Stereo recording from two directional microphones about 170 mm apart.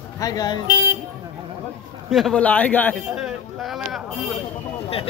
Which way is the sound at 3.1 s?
Centre (ahead or behind).